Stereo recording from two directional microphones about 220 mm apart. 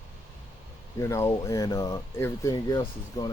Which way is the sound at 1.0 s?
15° left (ahead or behind).